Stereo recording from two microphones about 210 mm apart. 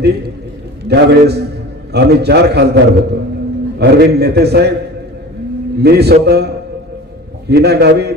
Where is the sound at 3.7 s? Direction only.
50° right (ahead or behind).